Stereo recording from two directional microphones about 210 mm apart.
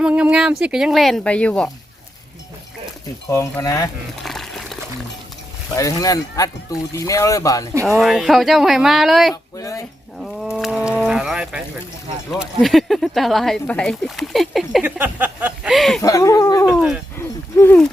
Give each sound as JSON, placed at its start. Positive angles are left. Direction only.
{"t": 0.0, "sound": "speech", "side_deg": -5}
{"t": 3.2, "sound": "speech", "side_deg": 15}
{"t": 4.2, "sound": "water", "side_deg": 0}
{"t": 5.7, "sound": "speech", "side_deg": 15}
{"t": 7.9, "sound": "speech", "side_deg": 0}
{"t": 9.3, "sound": "speech", "side_deg": 15}
{"t": 10.2, "sound": "a sound", "side_deg": 0}
{"t": 12.3, "sound": "speech", "side_deg": 0}
{"t": 16.0, "sound": "speech", "side_deg": 15}
{"t": 17.2, "sound": "a sound", "side_deg": 10}